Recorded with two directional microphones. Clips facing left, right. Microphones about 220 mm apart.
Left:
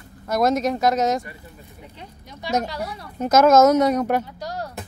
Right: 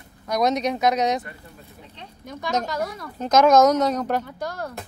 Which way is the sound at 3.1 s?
5° left (ahead or behind).